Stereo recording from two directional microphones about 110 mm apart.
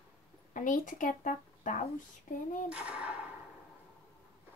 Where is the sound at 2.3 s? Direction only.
90° left.